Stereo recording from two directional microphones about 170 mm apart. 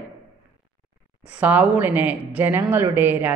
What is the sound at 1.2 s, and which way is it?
Speech, 10° right (ahead or behind).